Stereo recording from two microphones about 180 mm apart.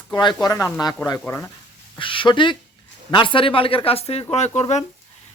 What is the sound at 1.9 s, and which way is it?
Speech, 30° left (ahead or behind).